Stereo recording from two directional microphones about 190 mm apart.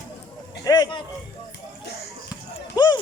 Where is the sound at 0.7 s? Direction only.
20° left (ahead or behind).